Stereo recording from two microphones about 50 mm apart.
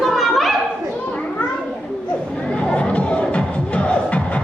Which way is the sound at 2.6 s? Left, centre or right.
Left.